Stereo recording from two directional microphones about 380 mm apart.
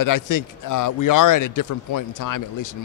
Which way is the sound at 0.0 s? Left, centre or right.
Left.